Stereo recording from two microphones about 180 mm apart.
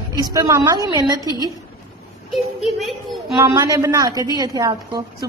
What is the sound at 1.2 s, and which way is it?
Speech, 20° left (ahead or behind).